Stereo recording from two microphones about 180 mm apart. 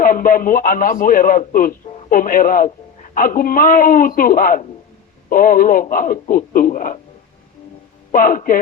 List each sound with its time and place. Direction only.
0.0 s a man's voice: 50° left (ahead or behind)
8.1 s a man's voice: 50° left (ahead or behind)